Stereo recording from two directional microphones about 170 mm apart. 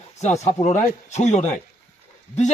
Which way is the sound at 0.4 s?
45° left (ahead or behind).